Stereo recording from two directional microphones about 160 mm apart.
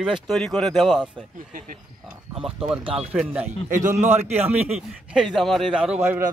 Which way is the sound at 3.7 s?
50° right (ahead or behind).